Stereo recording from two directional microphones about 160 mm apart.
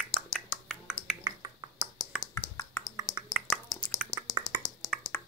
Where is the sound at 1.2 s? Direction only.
25° right (ahead or behind).